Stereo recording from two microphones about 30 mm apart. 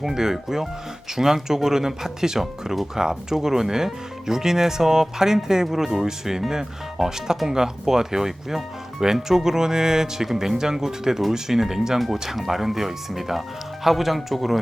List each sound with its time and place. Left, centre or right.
0.1 s speech: centre
11.9 s speech: centre